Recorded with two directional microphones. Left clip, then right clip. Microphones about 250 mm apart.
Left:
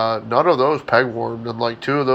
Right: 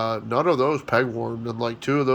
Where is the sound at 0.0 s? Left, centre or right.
Right.